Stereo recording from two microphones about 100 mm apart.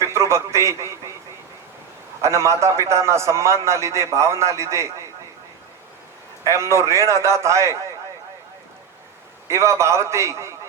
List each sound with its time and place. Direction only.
0.0 s a man's voice: 25° right (ahead or behind)
2.2 s a man's voice: 30° right (ahead or behind)
6.4 s a man's voice: 30° right (ahead or behind)
9.5 s a man's voice: 30° right (ahead or behind)